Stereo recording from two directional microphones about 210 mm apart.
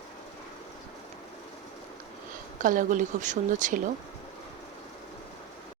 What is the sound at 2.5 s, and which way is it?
Speech, 40° right (ahead or behind).